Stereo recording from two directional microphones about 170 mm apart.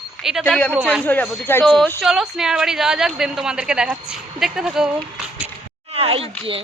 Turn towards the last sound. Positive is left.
turn(degrees=-30)  # may be behind; listen again after turning